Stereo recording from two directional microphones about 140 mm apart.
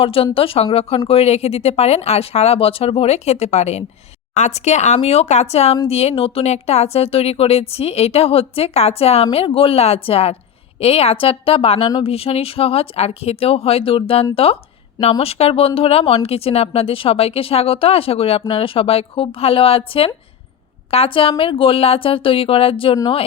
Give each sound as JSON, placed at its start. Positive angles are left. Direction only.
{"t": 0.0, "sound": "speech", "side_deg": 40}